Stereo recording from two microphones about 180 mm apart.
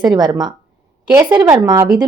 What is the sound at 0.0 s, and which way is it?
A woman's voice, 20° right (ahead or behind).